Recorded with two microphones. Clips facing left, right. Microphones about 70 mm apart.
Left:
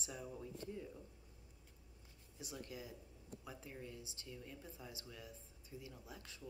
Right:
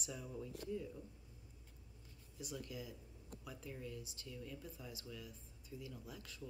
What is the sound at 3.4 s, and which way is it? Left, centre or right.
Speech, left.